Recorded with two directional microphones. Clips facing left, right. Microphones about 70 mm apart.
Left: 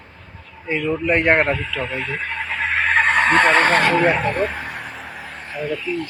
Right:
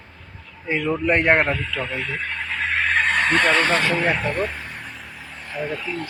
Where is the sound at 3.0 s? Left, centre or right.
Left.